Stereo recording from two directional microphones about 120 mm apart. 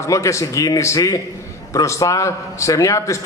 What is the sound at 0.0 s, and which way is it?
A man's voice, 25° left (ahead or behind).